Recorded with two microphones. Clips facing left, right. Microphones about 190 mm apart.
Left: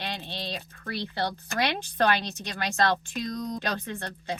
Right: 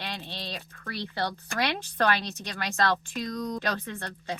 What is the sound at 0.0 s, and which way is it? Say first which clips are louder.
Speech: left 2 dB; 25° left (ahead or behind).